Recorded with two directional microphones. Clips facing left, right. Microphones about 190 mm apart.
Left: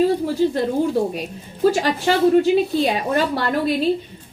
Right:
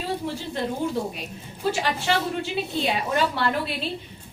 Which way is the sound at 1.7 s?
40° left (ahead or behind).